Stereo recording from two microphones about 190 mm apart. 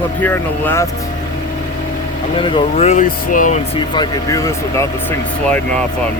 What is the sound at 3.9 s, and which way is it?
Speech, 15° left (ahead or behind).